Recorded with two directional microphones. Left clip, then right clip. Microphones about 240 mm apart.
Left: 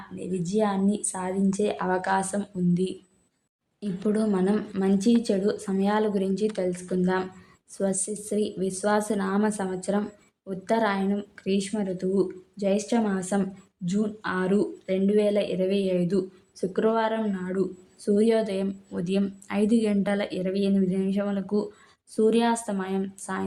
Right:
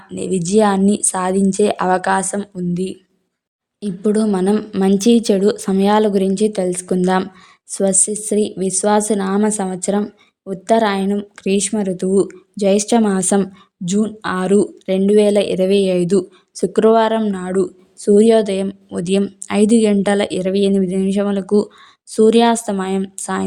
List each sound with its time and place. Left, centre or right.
0.2 s speech: right
3.8 s speech: right